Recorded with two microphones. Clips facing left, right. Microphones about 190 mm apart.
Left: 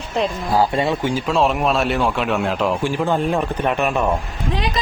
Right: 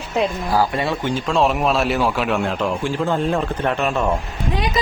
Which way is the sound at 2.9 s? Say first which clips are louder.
Left 1 dB; 15° left (ahead or behind).